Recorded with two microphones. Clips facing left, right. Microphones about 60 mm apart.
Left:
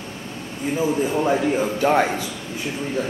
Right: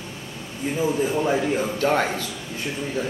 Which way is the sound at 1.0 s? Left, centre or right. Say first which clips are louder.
Left 2 dB; centre.